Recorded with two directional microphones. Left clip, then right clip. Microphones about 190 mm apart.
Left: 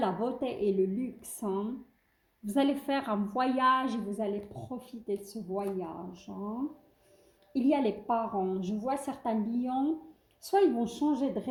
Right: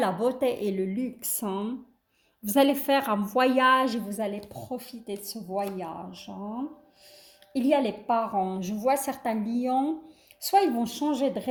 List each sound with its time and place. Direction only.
0.0 s a woman's voice: 40° right (ahead or behind)
7.5 s a woman's voice: 40° right (ahead or behind)